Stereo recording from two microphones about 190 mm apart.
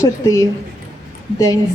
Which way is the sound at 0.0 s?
15° left (ahead or behind).